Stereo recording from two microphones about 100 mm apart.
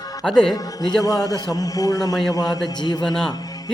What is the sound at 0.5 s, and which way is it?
Music, 40° left (ahead or behind).